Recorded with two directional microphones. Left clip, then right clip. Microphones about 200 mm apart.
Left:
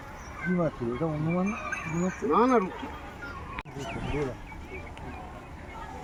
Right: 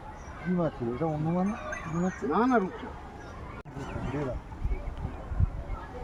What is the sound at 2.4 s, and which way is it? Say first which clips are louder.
Speech: left 2 dB; 45° right (ahead or behind).